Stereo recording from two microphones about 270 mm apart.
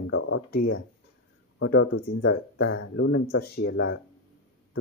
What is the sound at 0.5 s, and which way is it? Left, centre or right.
Speech, left.